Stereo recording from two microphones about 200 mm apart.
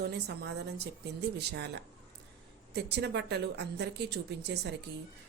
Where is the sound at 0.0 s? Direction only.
55° right (ahead or behind).